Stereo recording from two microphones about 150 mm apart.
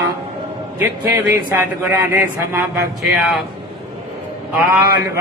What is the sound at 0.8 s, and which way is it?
Speech, 15° right (ahead or behind).